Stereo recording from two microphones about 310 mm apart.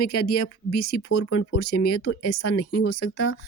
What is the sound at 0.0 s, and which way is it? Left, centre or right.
Speech, left.